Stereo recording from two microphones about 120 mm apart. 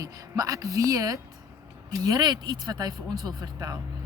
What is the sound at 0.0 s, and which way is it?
Speech, 30° right (ahead or behind).